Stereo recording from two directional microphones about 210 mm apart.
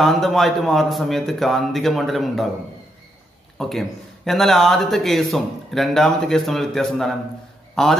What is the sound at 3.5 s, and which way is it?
Speech, centre (ahead or behind).